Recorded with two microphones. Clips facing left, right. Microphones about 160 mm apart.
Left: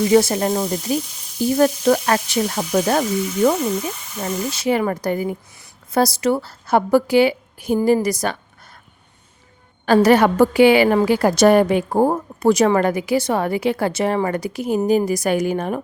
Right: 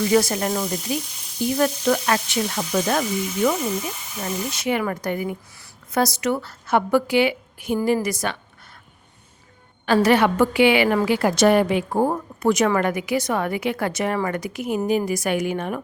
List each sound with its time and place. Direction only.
0.1 s sizzle: 25° left (ahead or behind)
1.5 s a woman's voice: 35° left (ahead or behind)
9.8 s a woman's voice: 40° left (ahead or behind)